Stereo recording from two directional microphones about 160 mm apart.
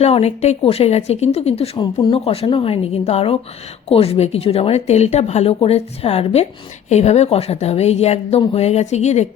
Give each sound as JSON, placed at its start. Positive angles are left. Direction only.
{"t": 0.0, "sound": "speech", "side_deg": 40}